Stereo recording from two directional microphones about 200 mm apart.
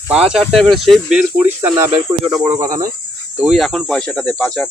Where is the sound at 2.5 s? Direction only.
15° right (ahead or behind).